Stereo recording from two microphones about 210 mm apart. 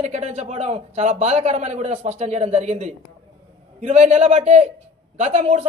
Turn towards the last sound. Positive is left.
turn(degrees=-35)  # may be behind; listen again after turning